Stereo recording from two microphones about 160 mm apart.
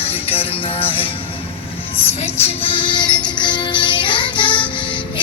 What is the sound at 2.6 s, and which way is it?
Music, 30° left (ahead or behind).